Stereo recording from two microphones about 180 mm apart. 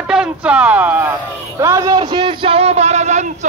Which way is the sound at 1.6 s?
15° right (ahead or behind).